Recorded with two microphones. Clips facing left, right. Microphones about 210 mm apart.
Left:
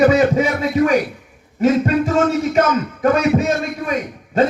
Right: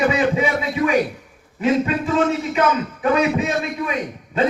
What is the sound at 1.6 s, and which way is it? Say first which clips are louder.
A man's voice: left 4 dB; 45° left (ahead or behind).